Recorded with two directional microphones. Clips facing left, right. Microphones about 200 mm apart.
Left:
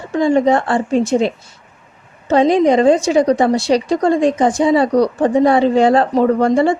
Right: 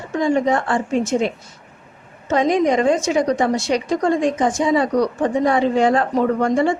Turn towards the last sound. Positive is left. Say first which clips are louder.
# left 4 dB
turn(degrees=35)  # may be behind; listen again after turning